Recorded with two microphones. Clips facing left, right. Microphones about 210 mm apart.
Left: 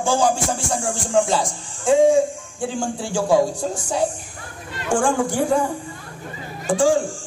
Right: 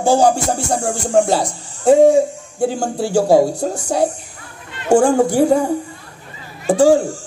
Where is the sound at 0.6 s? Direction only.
65° right (ahead or behind).